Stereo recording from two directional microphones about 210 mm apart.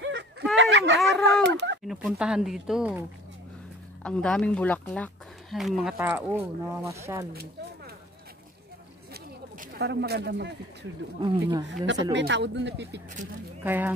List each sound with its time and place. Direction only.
0.0 s a sound: 60° right (ahead or behind)
1.9 s speech: 5° right (ahead or behind)
4.0 s speech: 5° left (ahead or behind); by 7.2 s 15° right (ahead or behind)
9.1 s speech: 50° right (ahead or behind)
11.1 s speech: 20° right (ahead or behind)
11.6 s speech: 60° right (ahead or behind)
13.7 s speech: 10° right (ahead or behind)